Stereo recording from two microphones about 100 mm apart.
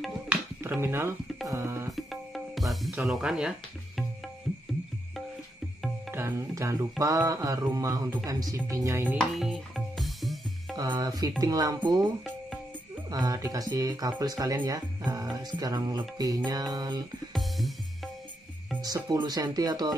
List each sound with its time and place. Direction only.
0.3 s a sound: 20° right (ahead or behind)
1.5 s music: 30° right (ahead or behind)
2.0 s music: centre (ahead or behind)
3.0 s speech: 5° right (ahead or behind)
4.5 s music: 5° left (ahead or behind)
6.1 s speech: 30° right (ahead or behind)
9.3 s music: centre (ahead or behind)
10.8 s speech: 40° right (ahead or behind)
13.1 s speech: 35° right (ahead or behind)
17.3 s music: centre (ahead or behind)
19.0 s speech: 45° right (ahead or behind)